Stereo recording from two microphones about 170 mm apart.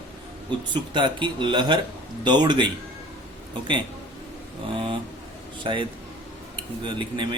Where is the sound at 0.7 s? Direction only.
30° right (ahead or behind).